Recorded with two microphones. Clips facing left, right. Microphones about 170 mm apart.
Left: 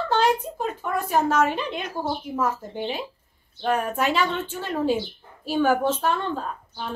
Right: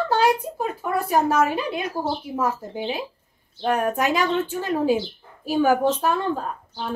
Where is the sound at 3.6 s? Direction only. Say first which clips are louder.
Right 2 dB; 40° right (ahead or behind).